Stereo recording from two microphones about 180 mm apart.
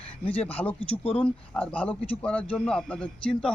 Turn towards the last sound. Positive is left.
turn(degrees=5)  # may be behind; listen again after turning